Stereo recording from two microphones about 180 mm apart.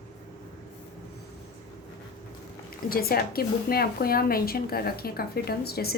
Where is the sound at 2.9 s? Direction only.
55° left (ahead or behind).